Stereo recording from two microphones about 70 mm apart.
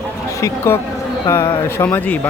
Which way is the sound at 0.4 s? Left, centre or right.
Left.